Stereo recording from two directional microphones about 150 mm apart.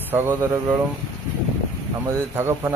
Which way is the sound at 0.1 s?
15° right (ahead or behind).